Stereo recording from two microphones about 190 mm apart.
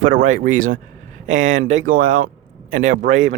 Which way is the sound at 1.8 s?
45° right (ahead or behind).